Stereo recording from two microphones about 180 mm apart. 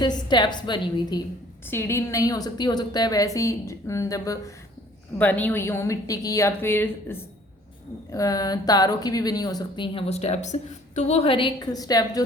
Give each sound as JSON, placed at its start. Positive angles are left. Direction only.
{"t": 0.0, "sound": "a woman's voice", "side_deg": 25}
{"t": 1.6, "sound": "a woman's voice", "side_deg": 15}